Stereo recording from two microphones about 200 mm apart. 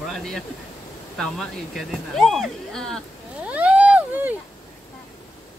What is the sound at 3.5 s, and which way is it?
Vehicle, 5° right (ahead or behind).